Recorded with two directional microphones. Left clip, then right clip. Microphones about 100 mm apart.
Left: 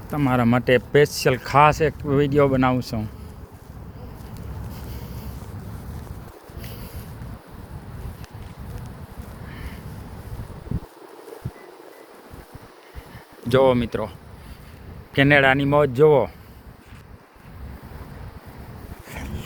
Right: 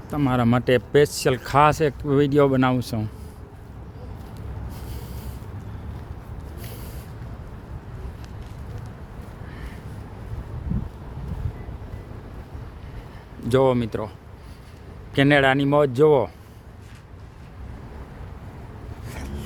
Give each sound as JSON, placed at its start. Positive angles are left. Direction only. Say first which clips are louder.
{"t": 0.1, "sound": "speech", "louder": "left 1 dB", "side_deg": -5}
{"t": 0.4, "sound": "speech", "louder": "left 2 dB", "side_deg": -20}
{"t": 4.7, "sound": "a sound", "louder": "left 1 dB", "side_deg": -60}
{"t": 9.5, "sound": "duck", "louder": "left 2 dB", "side_deg": -25}
{"t": 13.5, "sound": "speech", "louder": "left 2 dB", "side_deg": -10}
{"t": 15.1, "sound": "speech", "louder": "left 2 dB", "side_deg": -20}
{"t": 19.0, "sound": "vehicle", "louder": "left 2 dB", "side_deg": -15}